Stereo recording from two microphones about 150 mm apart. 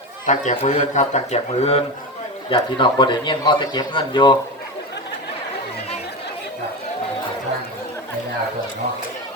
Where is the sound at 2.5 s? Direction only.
30° left (ahead or behind).